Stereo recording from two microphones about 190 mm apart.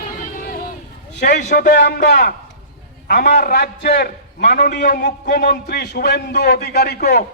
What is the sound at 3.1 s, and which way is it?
Speech, 45° left (ahead or behind).